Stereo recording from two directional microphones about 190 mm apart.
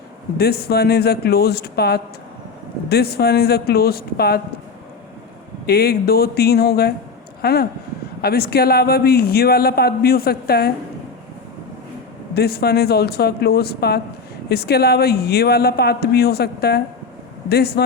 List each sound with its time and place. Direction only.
0.3 s a man's voice: 55° left (ahead or behind)
5.6 s a man's voice: 55° left (ahead or behind)
12.3 s a man's voice: 55° left (ahead or behind)